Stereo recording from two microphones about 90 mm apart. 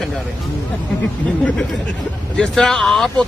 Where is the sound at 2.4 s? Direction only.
5° left (ahead or behind).